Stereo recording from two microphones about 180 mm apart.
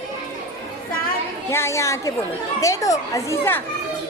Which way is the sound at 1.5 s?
15° left (ahead or behind).